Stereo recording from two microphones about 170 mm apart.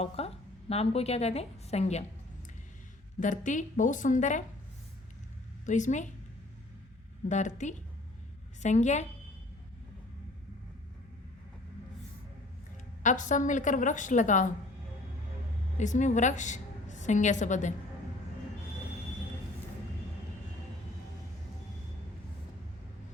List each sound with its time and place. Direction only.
0.0 s a woman's voice: 35° left (ahead or behind)
3.2 s a woman's voice: 50° left (ahead or behind)
5.6 s a woman's voice: 45° left (ahead or behind)
7.3 s a woman's voice: 45° left (ahead or behind)
13.0 s a woman's voice: 45° left (ahead or behind)
15.8 s a woman's voice: 45° left (ahead or behind)